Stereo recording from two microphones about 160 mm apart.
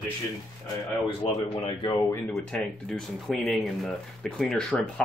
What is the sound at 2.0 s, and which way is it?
Speech, 15° left (ahead or behind).